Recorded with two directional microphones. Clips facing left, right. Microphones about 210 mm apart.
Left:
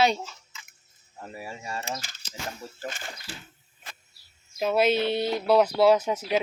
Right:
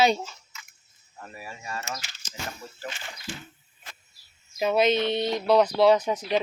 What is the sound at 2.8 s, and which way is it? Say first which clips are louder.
Speech: left 2 dB; 45° left (ahead or behind).